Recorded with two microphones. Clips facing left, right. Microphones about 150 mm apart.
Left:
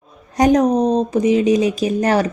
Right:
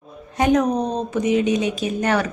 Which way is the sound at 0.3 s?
35° left (ahead or behind).